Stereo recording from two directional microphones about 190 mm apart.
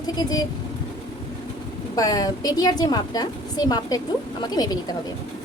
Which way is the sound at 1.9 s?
20° left (ahead or behind).